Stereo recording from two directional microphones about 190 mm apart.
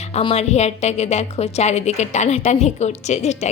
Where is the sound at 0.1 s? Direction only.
30° left (ahead or behind).